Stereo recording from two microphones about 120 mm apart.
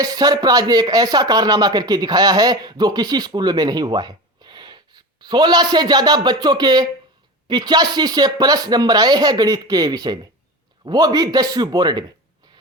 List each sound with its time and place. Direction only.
0.0 s speech: 30° right (ahead or behind)